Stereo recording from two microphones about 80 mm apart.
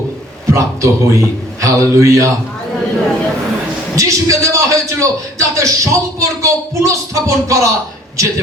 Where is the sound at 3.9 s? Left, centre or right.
Right.